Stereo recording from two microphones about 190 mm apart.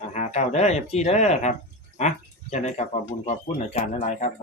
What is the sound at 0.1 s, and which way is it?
Speech, 35° left (ahead or behind).